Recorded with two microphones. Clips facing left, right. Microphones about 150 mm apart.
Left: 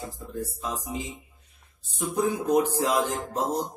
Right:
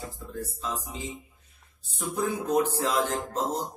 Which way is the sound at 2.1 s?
15° left (ahead or behind).